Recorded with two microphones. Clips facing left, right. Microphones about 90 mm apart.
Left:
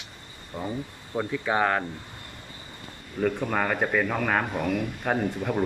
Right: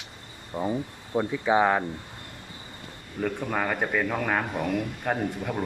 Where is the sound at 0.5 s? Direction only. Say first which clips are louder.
Right 4 dB; 10° right (ahead or behind).